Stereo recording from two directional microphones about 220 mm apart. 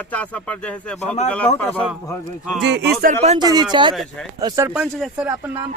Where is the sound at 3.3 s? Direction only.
20° right (ahead or behind).